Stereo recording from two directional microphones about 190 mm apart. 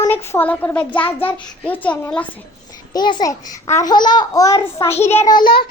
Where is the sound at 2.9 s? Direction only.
20° left (ahead or behind).